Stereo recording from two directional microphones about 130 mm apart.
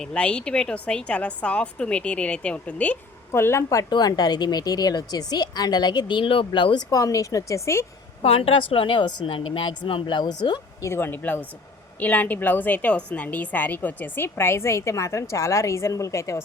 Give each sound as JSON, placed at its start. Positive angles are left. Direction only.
{"t": 0.0, "sound": "a woman's voice", "side_deg": 10}
{"t": 6.9, "sound": "a woman's voice", "side_deg": 25}
{"t": 8.2, "sound": "a woman's voice", "side_deg": 50}
{"t": 10.8, "sound": "a woman's voice", "side_deg": 20}